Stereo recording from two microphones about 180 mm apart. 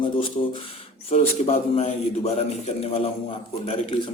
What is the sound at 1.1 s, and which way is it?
A man's voice, 35° left (ahead or behind).